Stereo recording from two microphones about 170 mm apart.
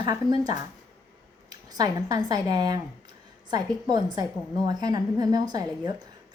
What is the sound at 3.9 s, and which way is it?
A woman's voice, 25° right (ahead or behind).